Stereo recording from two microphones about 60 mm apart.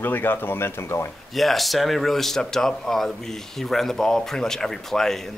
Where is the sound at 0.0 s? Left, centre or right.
Left.